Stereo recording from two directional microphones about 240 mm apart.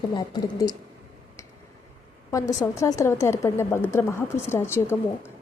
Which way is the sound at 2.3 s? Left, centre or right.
Centre.